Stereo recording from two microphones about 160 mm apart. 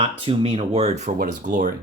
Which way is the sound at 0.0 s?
35° right (ahead or behind).